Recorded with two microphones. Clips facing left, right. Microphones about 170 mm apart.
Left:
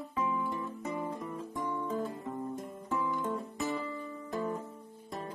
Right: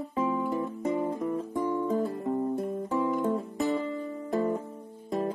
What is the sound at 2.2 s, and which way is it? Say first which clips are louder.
Music: right 9 dB; 40° right (ahead or behind).